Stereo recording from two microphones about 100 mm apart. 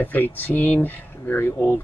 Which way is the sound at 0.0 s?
20° left (ahead or behind).